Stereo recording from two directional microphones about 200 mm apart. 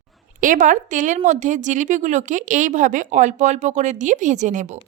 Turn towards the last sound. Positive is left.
turn(degrees=-40)  # may be behind; listen again after turning